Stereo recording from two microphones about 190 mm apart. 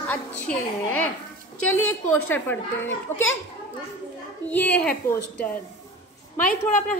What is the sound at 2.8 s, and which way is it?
Speech, 90° left.